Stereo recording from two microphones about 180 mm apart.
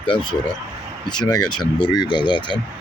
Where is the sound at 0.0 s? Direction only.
25° left (ahead or behind).